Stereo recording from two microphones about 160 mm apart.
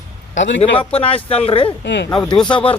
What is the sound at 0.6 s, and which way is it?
Speech, 35° left (ahead or behind).